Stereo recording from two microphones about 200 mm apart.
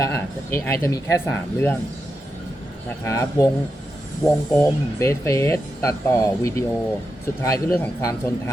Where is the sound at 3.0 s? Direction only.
15° left (ahead or behind).